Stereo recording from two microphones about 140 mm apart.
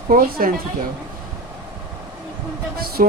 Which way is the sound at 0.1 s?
90° right.